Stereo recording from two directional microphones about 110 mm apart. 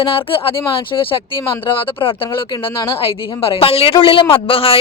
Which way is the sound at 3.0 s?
55° left (ahead or behind).